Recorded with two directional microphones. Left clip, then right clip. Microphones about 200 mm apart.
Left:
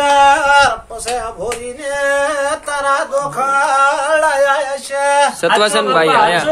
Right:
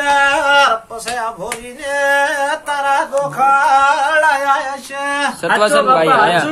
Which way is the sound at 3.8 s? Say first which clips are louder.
Right 1 dB; 50° left (ahead or behind).